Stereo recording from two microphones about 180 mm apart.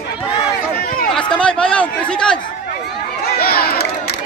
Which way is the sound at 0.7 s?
55° left (ahead or behind).